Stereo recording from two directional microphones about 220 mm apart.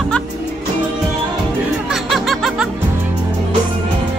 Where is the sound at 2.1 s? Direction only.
Centre (ahead or behind).